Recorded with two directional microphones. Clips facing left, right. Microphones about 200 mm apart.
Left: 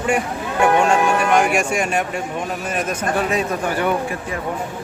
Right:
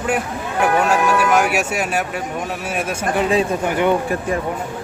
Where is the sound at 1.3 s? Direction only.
5° right (ahead or behind).